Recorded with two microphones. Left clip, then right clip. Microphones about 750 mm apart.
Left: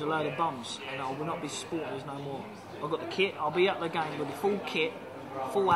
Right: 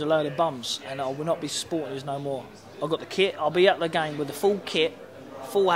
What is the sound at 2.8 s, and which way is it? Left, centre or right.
A man's voice, right.